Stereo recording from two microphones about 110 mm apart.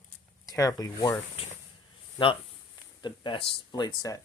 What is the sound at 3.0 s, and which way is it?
Speech, 50° left (ahead or behind).